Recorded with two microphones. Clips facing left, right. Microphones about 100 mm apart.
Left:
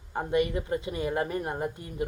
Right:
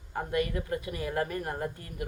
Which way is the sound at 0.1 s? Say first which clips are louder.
Left 4 dB; 20° left (ahead or behind).